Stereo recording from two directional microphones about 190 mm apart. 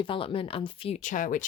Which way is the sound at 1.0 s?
45° left (ahead or behind).